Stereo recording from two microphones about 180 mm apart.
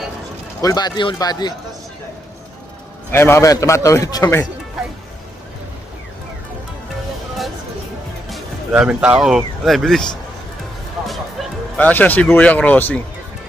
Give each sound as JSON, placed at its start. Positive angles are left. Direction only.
{"t": 0.6, "sound": "speech", "side_deg": 20}
{"t": 3.1, "sound": "a man's voice", "side_deg": 15}
{"t": 8.3, "sound": "speech", "side_deg": -5}
{"t": 11.0, "sound": "speech", "side_deg": 0}